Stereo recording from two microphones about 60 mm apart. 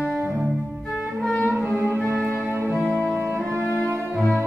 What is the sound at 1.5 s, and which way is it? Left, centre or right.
Music, right.